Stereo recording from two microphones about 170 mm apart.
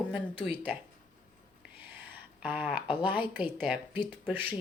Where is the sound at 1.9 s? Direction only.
10° right (ahead or behind).